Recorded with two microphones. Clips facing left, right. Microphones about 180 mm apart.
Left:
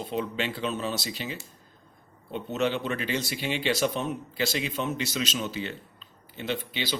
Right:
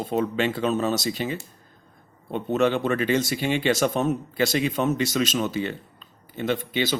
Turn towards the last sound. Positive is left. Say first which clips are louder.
# right 7 dB
turn(degrees=-50)  # may be behind; listen again after turning